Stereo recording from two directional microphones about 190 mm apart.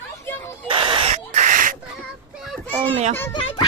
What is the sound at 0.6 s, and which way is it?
Owl, 25° right (ahead or behind).